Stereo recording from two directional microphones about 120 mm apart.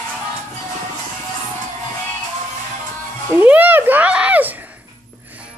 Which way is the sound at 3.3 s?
15° right (ahead or behind).